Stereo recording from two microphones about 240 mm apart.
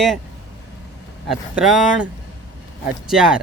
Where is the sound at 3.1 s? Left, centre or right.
Centre.